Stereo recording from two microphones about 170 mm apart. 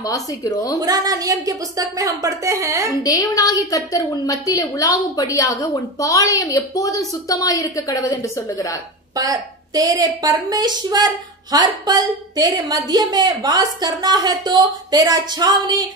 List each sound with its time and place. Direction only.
0.0 s a woman's voice: 20° left (ahead or behind)
0.7 s a woman's voice: 20° right (ahead or behind)
3.0 s a woman's voice: 20° left (ahead or behind)
9.1 s a woman's voice: 20° right (ahead or behind)